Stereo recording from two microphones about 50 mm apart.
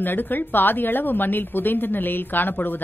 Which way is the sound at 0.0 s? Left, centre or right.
Left.